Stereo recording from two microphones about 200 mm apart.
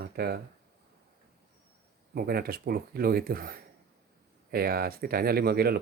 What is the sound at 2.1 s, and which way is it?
Speech, 50° right (ahead or behind).